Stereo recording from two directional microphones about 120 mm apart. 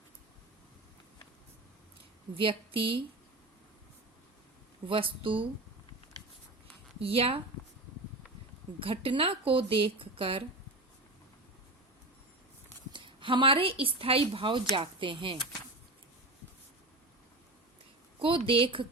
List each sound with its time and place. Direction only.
2.3 s speech: 45° right (ahead or behind)
4.9 s speech: 45° right (ahead or behind)
7.0 s speech: 50° right (ahead or behind)
8.8 s speech: 50° right (ahead or behind)
12.9 s speech: 40° right (ahead or behind)
18.2 s speech: 50° right (ahead or behind)